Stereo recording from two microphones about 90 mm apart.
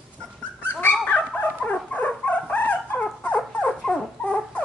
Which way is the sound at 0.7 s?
20° left (ahead or behind).